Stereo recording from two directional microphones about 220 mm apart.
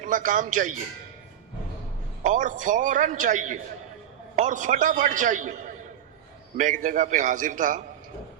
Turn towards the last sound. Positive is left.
turn(degrees=-35)  # may be behind; listen again after turning